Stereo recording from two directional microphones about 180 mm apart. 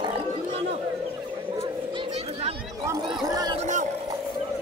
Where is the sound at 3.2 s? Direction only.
20° right (ahead or behind).